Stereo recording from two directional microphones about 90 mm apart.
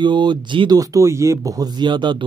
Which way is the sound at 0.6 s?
40° right (ahead or behind).